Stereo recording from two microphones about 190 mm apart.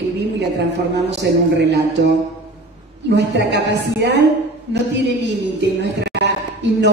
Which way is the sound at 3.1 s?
65° right (ahead or behind).